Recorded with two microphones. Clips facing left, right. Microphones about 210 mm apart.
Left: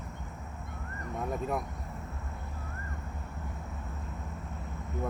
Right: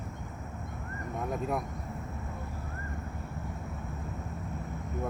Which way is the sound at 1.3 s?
Centre (ahead or behind).